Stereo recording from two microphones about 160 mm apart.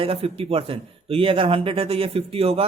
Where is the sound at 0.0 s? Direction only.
35° right (ahead or behind).